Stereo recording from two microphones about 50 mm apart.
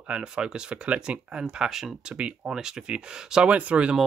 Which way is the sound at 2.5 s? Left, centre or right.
Centre.